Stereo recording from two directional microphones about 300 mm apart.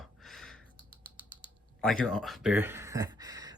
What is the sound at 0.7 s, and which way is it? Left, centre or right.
Finger snapping, right.